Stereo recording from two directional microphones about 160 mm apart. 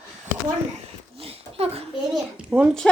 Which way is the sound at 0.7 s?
40° right (ahead or behind).